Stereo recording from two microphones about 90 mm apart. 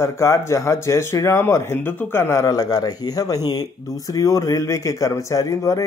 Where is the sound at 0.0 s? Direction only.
35° left (ahead or behind).